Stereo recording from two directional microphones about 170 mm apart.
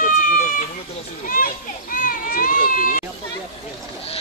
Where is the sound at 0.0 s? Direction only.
50° left (ahead or behind).